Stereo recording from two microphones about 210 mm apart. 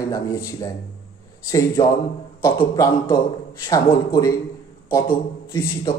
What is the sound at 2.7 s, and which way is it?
A man's voice, 15° left (ahead or behind).